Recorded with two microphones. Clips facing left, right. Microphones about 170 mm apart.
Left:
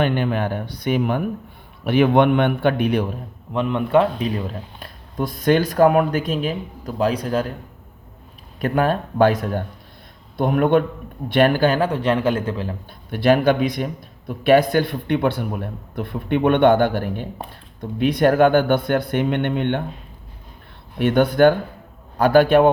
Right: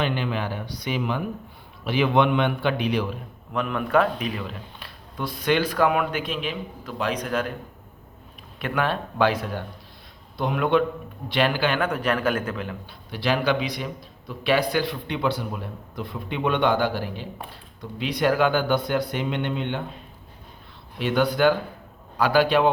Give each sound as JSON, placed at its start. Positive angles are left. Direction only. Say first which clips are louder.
{"t": 0.0, "sound": "a man's voice", "louder": "left 6 dB", "side_deg": 55}
{"t": 3.5, "sound": "speech", "louder": "left 5 dB", "side_deg": 25}
{"t": 8.6, "sound": "a man's voice", "louder": "left 6 dB", "side_deg": 40}
{"t": 13.1, "sound": "speech", "louder": "left 7 dB", "side_deg": 50}
{"t": 21.0, "sound": "a man's voice", "louder": "left 6 dB", "side_deg": 55}